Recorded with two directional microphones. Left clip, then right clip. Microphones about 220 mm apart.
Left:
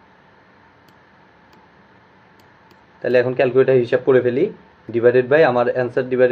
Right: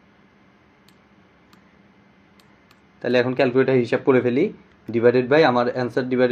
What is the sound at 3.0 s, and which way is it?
Speech, 25° right (ahead or behind).